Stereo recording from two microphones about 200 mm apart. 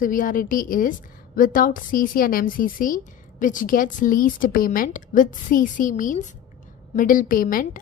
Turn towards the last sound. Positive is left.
turn(degrees=45)  # may be behind; listen again after turning